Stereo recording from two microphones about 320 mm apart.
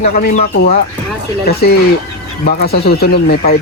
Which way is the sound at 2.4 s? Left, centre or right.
Left.